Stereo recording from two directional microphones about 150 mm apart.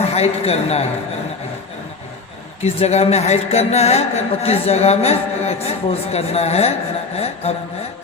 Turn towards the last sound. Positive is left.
turn(degrees=45)  # may be behind; listen again after turning